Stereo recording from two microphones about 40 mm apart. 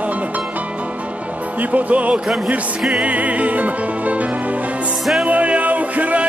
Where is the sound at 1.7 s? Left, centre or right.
Right.